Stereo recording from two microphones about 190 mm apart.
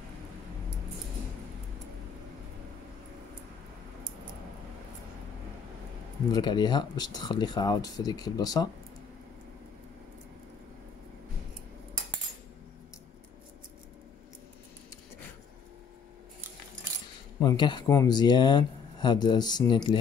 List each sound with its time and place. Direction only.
6.3 s speech: 25° left (ahead or behind)
17.4 s speech: 20° left (ahead or behind)